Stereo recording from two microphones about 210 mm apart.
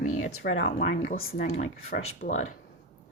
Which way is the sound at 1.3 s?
40° left (ahead or behind).